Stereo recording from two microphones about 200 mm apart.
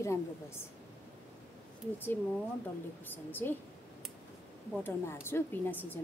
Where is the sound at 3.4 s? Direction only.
10° left (ahead or behind).